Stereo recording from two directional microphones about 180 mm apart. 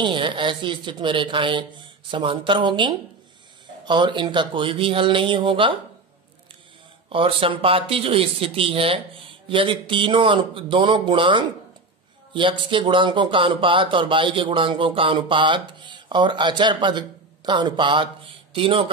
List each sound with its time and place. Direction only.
0.0 s speech: 25° right (ahead or behind)
7.1 s speech: 30° right (ahead or behind)